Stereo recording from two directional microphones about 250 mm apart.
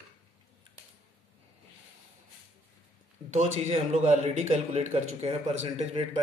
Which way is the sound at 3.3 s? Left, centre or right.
Right.